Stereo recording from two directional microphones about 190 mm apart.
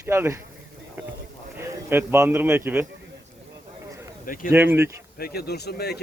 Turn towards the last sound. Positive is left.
turn(degrees=60)  # may be behind; listen again after turning